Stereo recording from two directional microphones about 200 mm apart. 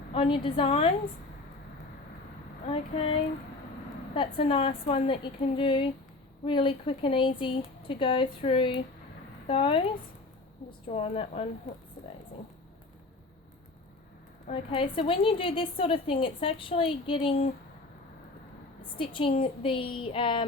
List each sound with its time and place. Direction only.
0.1 s a woman's voice: 25° left (ahead or behind)
2.6 s a woman's voice: 30° left (ahead or behind)
14.4 s a woman's voice: 30° left (ahead or behind)
18.9 s a woman's voice: 25° left (ahead or behind)